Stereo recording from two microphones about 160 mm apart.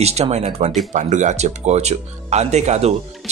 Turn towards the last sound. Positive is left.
turn(degrees=-45)  # may be behind; listen again after turning